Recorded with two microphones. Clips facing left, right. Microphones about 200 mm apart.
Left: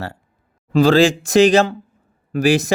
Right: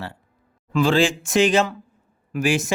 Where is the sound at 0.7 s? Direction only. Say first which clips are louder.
Left 6 dB; 40° left (ahead or behind).